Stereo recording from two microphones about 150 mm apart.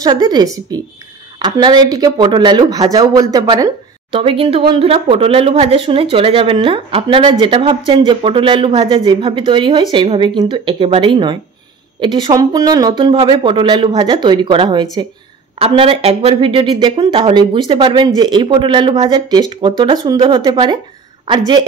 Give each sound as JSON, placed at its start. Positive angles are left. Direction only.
{"t": 0.0, "sound": "speech", "side_deg": -25}
{"t": 4.1, "sound": "speech", "side_deg": -40}